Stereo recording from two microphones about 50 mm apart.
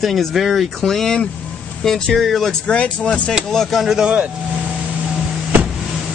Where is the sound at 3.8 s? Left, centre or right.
Centre.